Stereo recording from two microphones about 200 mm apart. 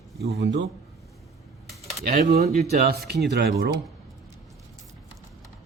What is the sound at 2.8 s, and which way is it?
Speech, 50° right (ahead or behind).